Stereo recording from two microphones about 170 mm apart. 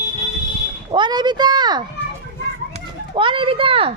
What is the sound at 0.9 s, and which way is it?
A child's voice, 25° right (ahead or behind).